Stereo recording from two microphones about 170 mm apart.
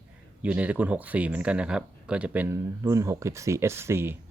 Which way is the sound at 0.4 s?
10° right (ahead or behind).